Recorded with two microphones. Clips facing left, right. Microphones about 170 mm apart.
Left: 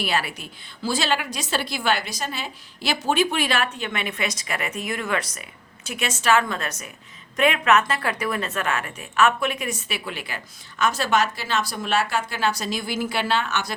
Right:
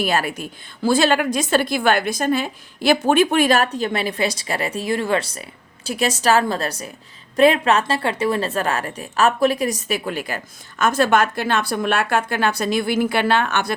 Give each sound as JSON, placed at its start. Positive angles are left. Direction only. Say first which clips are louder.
{"t": 0.0, "sound": "a woman's voice", "louder": "right 5 dB", "side_deg": -45}